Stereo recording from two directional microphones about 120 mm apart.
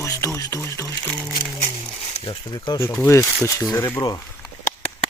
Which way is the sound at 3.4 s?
25° left (ahead or behind).